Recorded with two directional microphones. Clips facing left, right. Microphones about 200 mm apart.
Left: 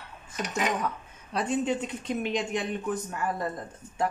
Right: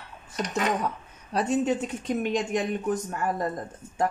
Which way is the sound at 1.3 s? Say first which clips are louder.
Right 3 dB; 40° right (ahead or behind).